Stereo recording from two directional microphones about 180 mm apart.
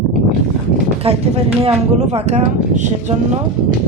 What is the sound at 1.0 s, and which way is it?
Speech, 35° right (ahead or behind).